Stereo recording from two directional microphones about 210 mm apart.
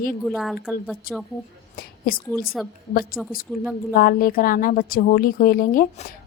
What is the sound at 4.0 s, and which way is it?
A woman's voice, 45° left (ahead or behind).